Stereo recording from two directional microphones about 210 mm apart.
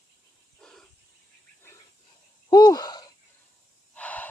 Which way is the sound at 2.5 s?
20° left (ahead or behind).